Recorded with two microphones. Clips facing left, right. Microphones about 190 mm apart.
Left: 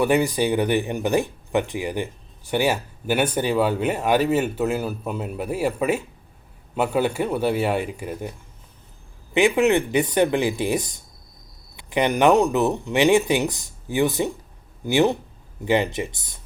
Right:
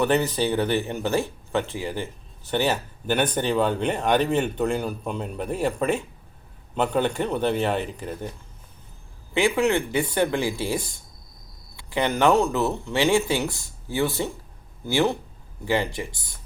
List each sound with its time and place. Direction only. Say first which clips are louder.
0.0 s speech: left 2 dB; 10° left (ahead or behind)